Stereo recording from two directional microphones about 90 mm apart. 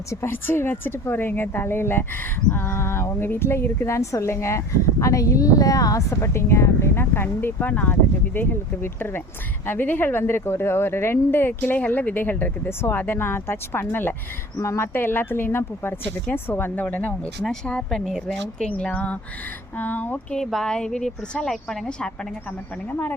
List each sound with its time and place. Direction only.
0.1 s a woman's voice: 30° left (ahead or behind)
17.4 s a woman's voice: 10° left (ahead or behind)
20.4 s a woman's voice: 5° left (ahead or behind)
22.9 s a woman's voice: 20° left (ahead or behind)